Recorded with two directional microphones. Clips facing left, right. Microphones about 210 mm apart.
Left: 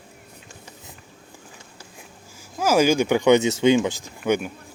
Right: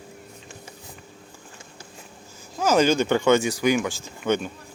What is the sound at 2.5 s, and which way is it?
Speech, 10° left (ahead or behind).